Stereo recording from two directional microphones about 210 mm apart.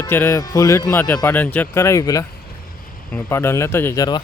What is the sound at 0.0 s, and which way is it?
A man's voice, 10° left (ahead or behind).